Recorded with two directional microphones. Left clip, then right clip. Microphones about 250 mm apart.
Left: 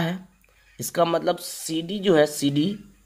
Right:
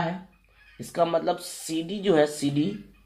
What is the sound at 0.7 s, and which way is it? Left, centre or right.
Speech, left.